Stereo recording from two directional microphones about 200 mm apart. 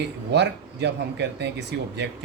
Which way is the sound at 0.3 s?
60° right (ahead or behind).